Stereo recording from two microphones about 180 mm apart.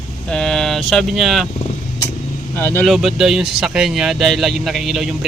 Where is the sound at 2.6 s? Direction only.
15° left (ahead or behind).